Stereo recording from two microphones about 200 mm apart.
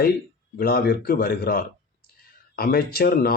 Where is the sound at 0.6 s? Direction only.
50° left (ahead or behind).